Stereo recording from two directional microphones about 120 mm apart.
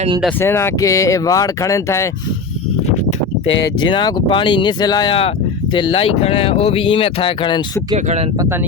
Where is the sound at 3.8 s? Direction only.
40° left (ahead or behind).